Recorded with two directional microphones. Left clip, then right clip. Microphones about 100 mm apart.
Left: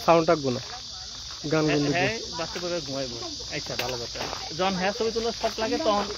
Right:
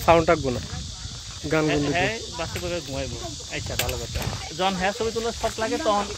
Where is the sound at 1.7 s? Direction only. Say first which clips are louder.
Right 1 dB; 20° left (ahead or behind).